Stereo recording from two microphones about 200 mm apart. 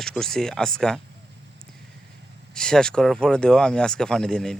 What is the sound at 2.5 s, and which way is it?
Speech, 5° left (ahead or behind).